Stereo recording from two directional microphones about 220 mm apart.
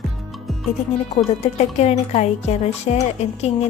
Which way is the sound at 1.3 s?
30° left (ahead or behind).